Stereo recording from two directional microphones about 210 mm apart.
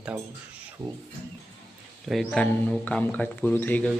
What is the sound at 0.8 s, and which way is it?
Speech, 20° right (ahead or behind).